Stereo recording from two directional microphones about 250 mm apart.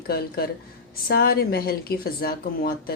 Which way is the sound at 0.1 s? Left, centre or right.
Left.